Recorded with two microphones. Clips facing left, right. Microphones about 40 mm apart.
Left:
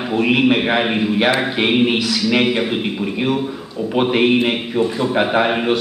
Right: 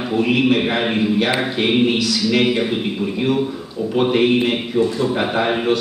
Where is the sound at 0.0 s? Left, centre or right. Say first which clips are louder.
Left 1 dB; centre.